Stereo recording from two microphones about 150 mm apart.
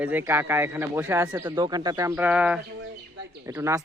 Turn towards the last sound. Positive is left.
turn(degrees=-20)  # may be behind; listen again after turning